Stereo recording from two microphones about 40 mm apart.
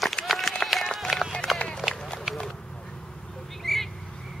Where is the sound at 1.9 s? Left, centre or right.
Centre.